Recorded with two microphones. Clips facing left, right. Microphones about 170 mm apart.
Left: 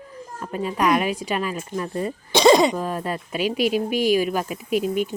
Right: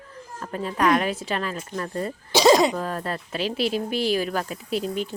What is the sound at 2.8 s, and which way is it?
Speech, 10° left (ahead or behind).